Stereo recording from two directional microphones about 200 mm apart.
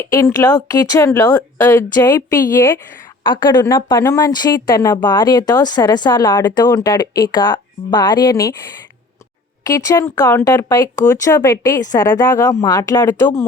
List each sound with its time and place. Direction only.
0.0 s speech: 15° left (ahead or behind)
9.6 s speech: 15° left (ahead or behind)